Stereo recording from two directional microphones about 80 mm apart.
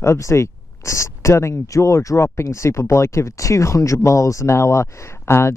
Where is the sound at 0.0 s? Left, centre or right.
Left.